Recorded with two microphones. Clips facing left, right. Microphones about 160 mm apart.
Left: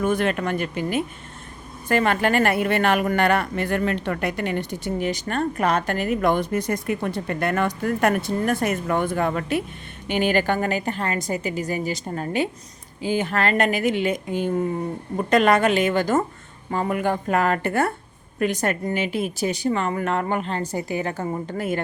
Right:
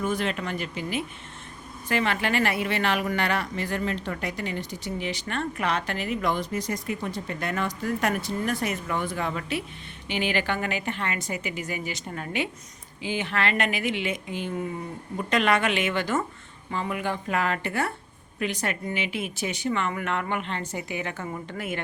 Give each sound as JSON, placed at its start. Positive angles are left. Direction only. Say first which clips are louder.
{"t": 0.0, "sound": "speech", "louder": "left 6 dB", "side_deg": 55}